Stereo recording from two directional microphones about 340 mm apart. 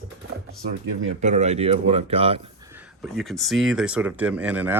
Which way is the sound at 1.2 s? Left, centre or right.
Centre.